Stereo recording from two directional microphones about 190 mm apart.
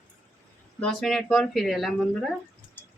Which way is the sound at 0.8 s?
5° left (ahead or behind).